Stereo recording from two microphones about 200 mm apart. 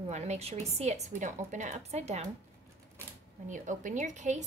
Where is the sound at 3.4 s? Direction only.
40° right (ahead or behind).